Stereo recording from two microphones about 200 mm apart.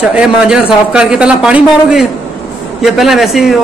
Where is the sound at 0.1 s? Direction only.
5° right (ahead or behind).